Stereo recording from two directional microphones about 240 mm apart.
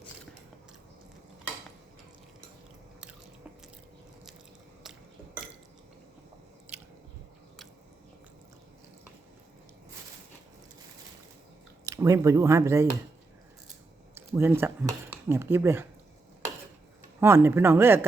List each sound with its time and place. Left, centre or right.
4.8 s a sound: centre
6.7 s biting: centre
11.9 s speech: centre
14.2 s speech: centre
17.2 s speech: centre